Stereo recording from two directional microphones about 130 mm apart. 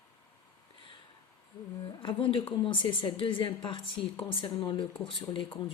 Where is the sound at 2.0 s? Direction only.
40° left (ahead or behind).